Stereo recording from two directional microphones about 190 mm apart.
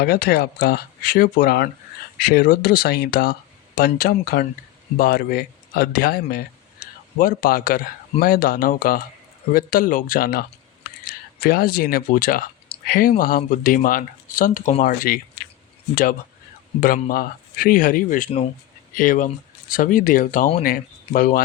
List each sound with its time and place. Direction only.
0.0 s speech: 55° left (ahead or behind)
16.8 s speech: 50° left (ahead or behind)